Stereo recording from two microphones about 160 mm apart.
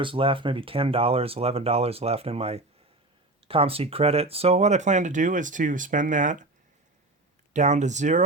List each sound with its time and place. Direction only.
0.0 s speech: 35° right (ahead or behind); by 6.5 s 50° right (ahead or behind)
7.5 s speech: 50° right (ahead or behind)